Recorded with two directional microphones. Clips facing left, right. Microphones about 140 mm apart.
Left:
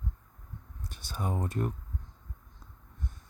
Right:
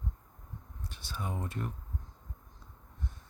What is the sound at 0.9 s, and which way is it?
Speech, 45° left (ahead or behind).